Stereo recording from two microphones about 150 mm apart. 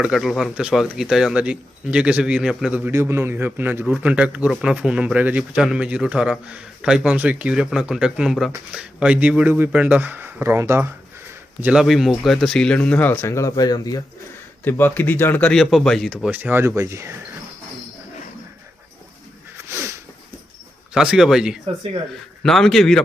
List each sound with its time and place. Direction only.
0.0 s a man's voice: 5° right (ahead or behind)
11.6 s speech: 5° right (ahead or behind); by 14.0 s 25° left (ahead or behind)
14.6 s speech: 15° left (ahead or behind); by 17.2 s 20° right (ahead or behind)
19.5 s sniff: 20° right (ahead or behind)
20.9 s speech: 5° right (ahead or behind)